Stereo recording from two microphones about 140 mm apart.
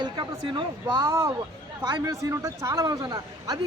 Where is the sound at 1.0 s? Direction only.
20° right (ahead or behind).